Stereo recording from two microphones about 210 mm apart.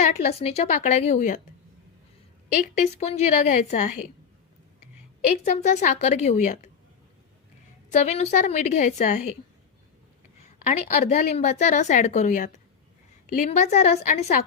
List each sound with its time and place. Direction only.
0.0 s a woman's voice: 30° left (ahead or behind)
2.8 s a woman's voice: 30° left (ahead or behind)
5.5 s a woman's voice: 35° left (ahead or behind)
7.9 s a woman's voice: 30° left (ahead or behind)
10.7 s a woman's voice: 40° left (ahead or behind)
11.3 s a woman's voice: 35° left (ahead or behind)